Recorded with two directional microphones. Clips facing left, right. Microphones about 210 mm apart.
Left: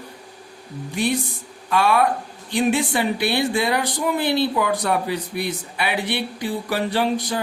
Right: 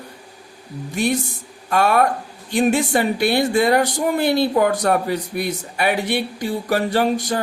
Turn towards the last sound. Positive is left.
turn(degrees=-45)  # may be behind; listen again after turning